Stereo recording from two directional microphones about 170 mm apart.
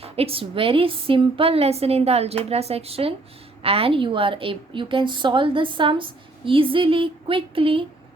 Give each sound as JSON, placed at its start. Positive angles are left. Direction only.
{"t": 0.0, "sound": "a woman's voice", "side_deg": -35}